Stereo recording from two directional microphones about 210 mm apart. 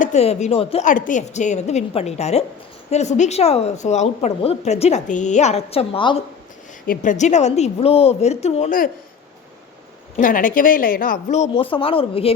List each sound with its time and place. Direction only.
0.0 s a woman's voice: 30° left (ahead or behind)
6.8 s a woman's voice: 40° left (ahead or behind)
10.2 s a woman's voice: 40° left (ahead or behind)